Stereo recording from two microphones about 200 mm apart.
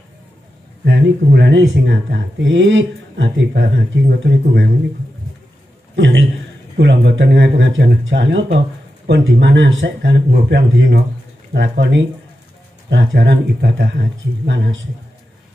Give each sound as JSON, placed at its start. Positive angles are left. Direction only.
{"t": 0.8, "sound": "speech", "side_deg": -60}
{"t": 5.9, "sound": "a man's voice", "side_deg": -65}